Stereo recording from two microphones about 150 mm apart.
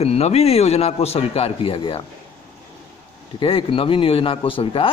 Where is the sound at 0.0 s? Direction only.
45° left (ahead or behind).